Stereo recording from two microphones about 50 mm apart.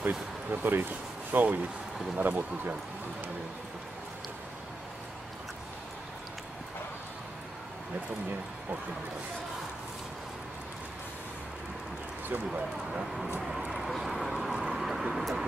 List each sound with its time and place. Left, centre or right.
0.0 s speech: right
13.7 s dog: centre
14.6 s vehicle: centre